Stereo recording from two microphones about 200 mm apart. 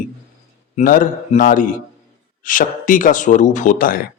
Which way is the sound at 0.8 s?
40° left (ahead or behind).